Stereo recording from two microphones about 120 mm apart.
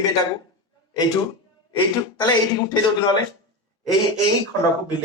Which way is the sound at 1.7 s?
35° left (ahead or behind).